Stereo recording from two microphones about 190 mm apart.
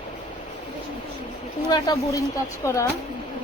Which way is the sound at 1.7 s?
20° left (ahead or behind).